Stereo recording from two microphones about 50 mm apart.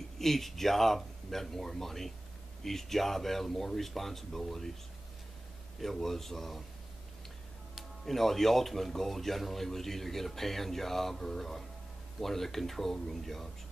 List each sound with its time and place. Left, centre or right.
0.2 s speech: centre
5.8 s speech: centre
8.0 s speech: centre